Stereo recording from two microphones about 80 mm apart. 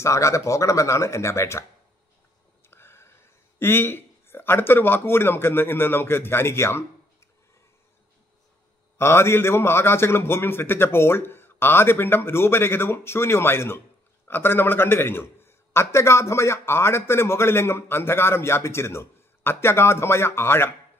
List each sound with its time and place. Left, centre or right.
0.0 s a man's voice: left
2.7 s a sound: left
3.5 s speech: left
8.9 s a man's voice: left